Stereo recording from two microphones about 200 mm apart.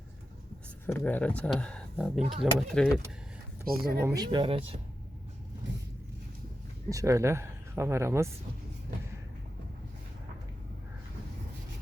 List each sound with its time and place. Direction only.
0.9 s speech: 10° left (ahead or behind)
3.7 s speech: 50° right (ahead or behind)
4.0 s speech: 20° right (ahead or behind)
6.9 s speech: 15° right (ahead or behind)